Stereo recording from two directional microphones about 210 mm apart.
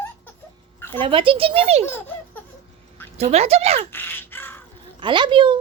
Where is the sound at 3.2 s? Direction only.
30° right (ahead or behind).